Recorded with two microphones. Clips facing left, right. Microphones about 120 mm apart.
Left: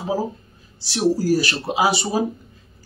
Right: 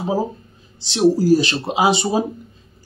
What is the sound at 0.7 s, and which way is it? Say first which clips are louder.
Speech: right 4 dB; 20° right (ahead or behind).